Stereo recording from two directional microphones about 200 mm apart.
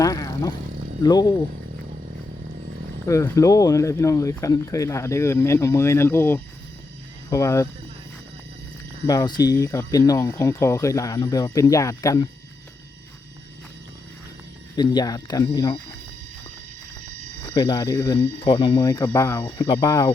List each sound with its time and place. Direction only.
0.0 s a sound: 20° left (ahead or behind)
1.0 s speech: 20° left (ahead or behind)
3.1 s speech: 15° left (ahead or behind)
9.0 s speech: 20° left (ahead or behind)
14.8 s speech: 20° left (ahead or behind)
17.4 s speech: 20° left (ahead or behind)